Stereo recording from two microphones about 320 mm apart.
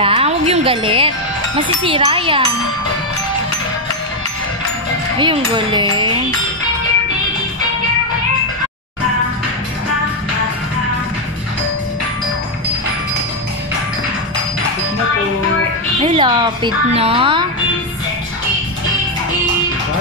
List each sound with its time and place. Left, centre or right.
0.0 s a woman's voice: centre
5.2 s a woman's voice: centre
16.0 s a woman's voice: centre